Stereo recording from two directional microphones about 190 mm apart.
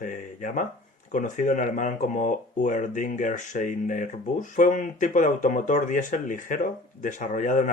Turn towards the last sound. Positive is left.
turn(degrees=40)  # may be behind; listen again after turning